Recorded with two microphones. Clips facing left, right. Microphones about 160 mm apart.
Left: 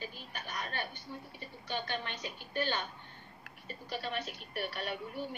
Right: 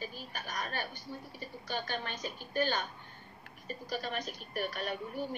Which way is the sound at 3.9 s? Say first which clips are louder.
Right 1 dB; 40° right (ahead or behind).